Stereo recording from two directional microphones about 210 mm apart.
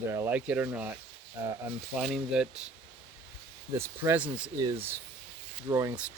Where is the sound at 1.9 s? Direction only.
Centre (ahead or behind).